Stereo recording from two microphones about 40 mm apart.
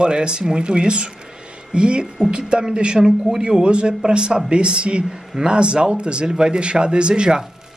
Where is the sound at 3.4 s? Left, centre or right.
Right.